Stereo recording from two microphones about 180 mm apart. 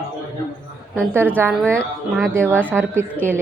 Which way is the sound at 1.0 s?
10° right (ahead or behind).